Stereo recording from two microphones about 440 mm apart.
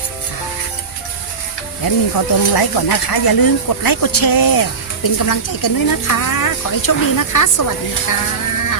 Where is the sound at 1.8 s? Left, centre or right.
Left.